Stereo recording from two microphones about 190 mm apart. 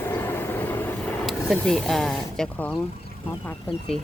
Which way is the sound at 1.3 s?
Centre (ahead or behind).